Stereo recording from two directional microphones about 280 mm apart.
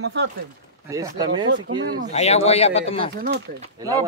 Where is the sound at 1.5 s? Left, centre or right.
Right.